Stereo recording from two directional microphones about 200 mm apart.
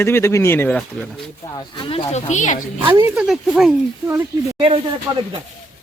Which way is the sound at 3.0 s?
5° right (ahead or behind).